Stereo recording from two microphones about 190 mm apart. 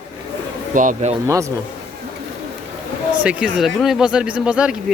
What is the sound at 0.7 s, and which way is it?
Speech, 40° right (ahead or behind).